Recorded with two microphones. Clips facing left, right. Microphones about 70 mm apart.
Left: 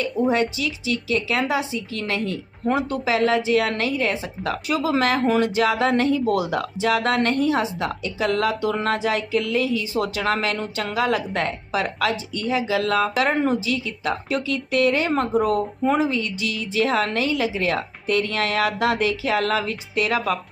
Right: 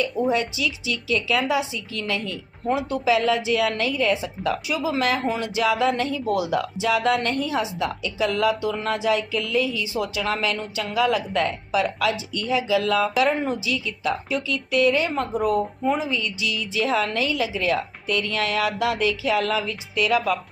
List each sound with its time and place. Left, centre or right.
0.3 s a woman's voice: left
15.8 s a woman's voice: left